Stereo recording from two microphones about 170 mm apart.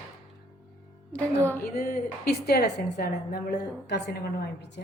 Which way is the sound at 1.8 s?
65° left (ahead or behind).